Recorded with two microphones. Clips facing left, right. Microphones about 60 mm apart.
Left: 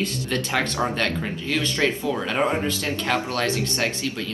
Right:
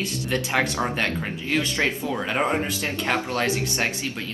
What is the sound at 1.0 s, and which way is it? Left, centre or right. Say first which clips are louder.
Speech: left 1 dB; right.